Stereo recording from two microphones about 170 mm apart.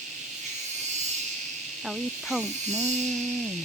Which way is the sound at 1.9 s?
Centre (ahead or behind).